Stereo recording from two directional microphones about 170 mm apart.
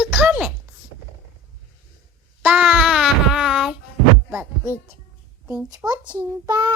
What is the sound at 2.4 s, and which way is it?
Child singing, 5° right (ahead or behind).